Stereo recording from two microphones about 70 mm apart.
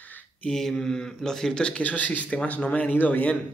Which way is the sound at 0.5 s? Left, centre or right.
Centre.